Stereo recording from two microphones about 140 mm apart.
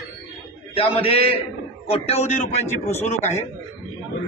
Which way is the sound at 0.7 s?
40° left (ahead or behind).